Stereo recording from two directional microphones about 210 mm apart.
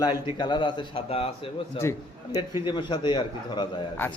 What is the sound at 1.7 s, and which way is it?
A man's voice, 15° left (ahead or behind).